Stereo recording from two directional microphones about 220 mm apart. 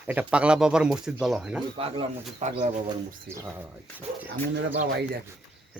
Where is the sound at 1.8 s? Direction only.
25° right (ahead or behind).